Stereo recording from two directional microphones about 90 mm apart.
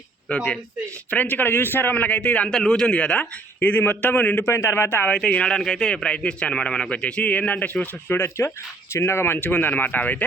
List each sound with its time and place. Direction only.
0.3 s a man's voice: 15° left (ahead or behind)
5.1 s a man's voice: 10° left (ahead or behind)